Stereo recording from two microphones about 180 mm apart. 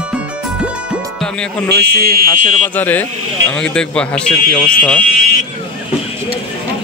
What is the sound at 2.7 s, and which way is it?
A man's voice, 10° left (ahead or behind).